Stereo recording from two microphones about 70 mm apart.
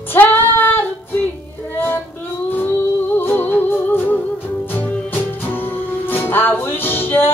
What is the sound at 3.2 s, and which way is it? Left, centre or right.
Music, left.